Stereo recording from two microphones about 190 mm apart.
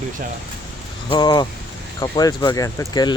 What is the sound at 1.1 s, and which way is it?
Speech, 25° left (ahead or behind).